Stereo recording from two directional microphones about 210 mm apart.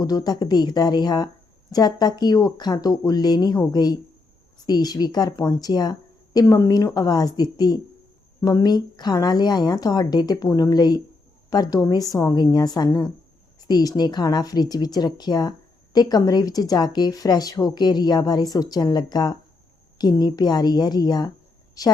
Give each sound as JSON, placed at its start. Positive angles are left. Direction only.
{"t": 0.0, "sound": "a woman's voice", "side_deg": 20}